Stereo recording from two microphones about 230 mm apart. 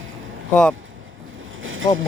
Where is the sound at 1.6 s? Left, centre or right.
Right.